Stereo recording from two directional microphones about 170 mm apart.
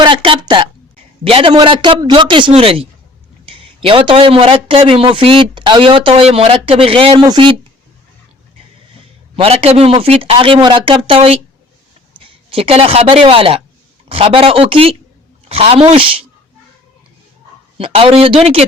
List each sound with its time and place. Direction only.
0.0 s a sound: 30° right (ahead or behind)
1.2 s a man's voice: 30° right (ahead or behind)
9.3 s a man's voice: 35° right (ahead or behind)
17.7 s a man's voice: 30° right (ahead or behind)